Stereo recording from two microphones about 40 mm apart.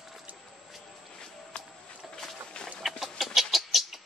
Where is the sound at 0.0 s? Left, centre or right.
Centre.